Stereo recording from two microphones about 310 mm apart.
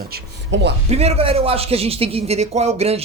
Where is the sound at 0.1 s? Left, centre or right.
Right.